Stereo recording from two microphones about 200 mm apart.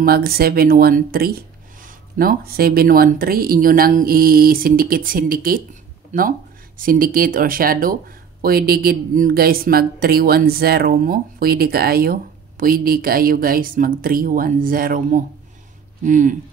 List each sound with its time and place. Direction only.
0.0 s speech: 50° right (ahead or behind)